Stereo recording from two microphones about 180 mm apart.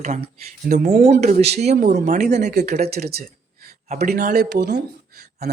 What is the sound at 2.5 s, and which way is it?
Speech, 65° right (ahead or behind).